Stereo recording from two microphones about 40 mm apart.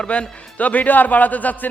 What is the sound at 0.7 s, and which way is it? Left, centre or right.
Speech, left.